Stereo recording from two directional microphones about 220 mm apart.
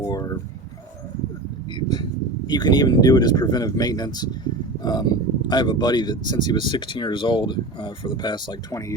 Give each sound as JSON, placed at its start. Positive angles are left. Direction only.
{"t": 0.0, "sound": "speech", "side_deg": 15}
{"t": 1.7, "sound": "speech", "side_deg": 20}